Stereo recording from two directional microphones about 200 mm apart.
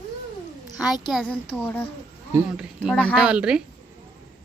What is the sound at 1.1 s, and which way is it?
Speech, 5° left (ahead or behind).